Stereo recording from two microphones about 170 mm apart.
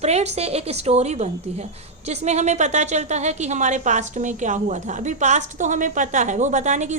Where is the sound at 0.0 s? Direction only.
40° right (ahead or behind).